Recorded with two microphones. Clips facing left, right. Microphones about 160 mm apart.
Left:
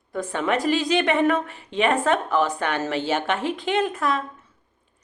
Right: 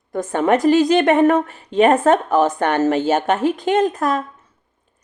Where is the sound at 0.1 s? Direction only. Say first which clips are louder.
Right 7 dB; 45° right (ahead or behind).